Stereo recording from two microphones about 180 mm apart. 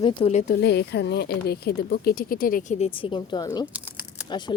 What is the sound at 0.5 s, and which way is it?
A woman's voice, 65° left (ahead or behind).